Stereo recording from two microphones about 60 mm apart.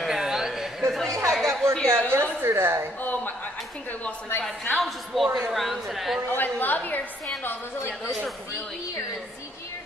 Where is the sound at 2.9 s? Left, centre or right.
Left.